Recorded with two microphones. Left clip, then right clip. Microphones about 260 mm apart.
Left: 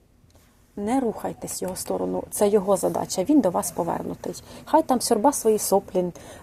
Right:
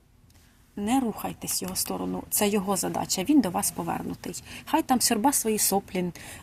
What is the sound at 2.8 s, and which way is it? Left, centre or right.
Speech, right.